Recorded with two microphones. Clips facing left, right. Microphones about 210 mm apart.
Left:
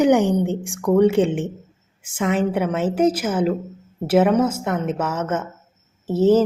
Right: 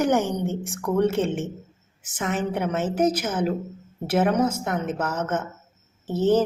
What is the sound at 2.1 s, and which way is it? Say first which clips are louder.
A woman's voice: left 6 dB; 5° right (ahead or behind).